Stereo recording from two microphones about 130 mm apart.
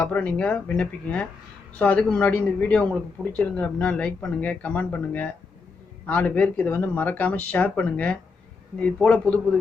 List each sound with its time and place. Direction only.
0.0 s a man's voice: 10° left (ahead or behind)